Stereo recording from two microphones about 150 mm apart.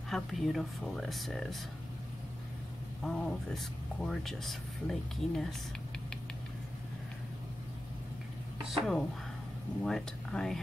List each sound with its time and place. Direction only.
0.1 s speech: centre (ahead or behind)
3.0 s speech: 5° left (ahead or behind)
8.6 s speech: centre (ahead or behind)